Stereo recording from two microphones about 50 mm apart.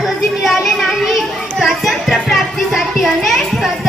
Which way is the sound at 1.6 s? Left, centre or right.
Centre.